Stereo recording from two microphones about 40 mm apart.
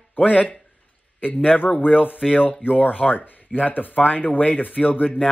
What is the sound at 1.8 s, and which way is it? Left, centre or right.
Speech, left.